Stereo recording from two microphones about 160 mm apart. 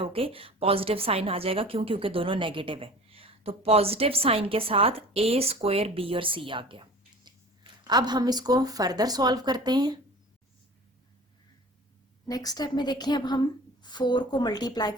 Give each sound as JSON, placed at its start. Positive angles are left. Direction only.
{"t": 0.0, "sound": "a woman's voice", "side_deg": -35}
{"t": 12.3, "sound": "a woman's voice", "side_deg": 25}